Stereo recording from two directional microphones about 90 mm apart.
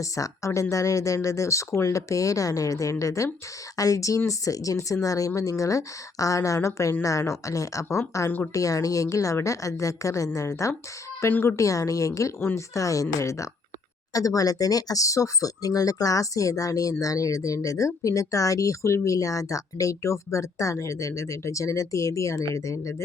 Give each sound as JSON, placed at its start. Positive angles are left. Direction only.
{"t": 0.0, "sound": "speech", "side_deg": 35}